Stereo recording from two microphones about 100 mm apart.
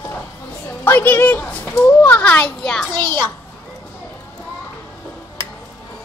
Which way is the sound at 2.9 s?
50° right (ahead or behind).